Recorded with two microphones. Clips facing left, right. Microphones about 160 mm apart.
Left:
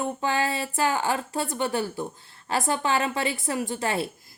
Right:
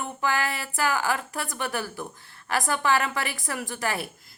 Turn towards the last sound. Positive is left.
turn(degrees=25)  # may be behind; listen again after turning